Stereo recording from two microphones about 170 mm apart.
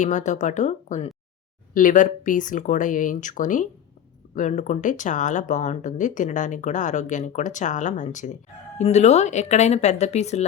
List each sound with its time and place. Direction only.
0.0 s speech: 45° left (ahead or behind)